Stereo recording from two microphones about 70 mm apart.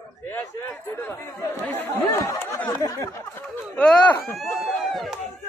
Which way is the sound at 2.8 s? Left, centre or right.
Left.